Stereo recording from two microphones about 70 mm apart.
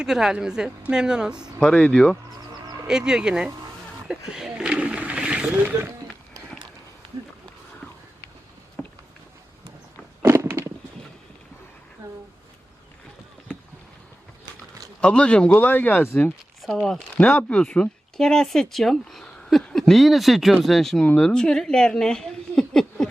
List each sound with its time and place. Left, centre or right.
0.0 s speech: centre
1.5 s speech: centre
2.8 s speech: centre
4.1 s wild animals: centre
8.8 s a sound: left
10.2 s a sound: right
15.0 s speech: centre
16.6 s speech: centre
17.2 s speech: left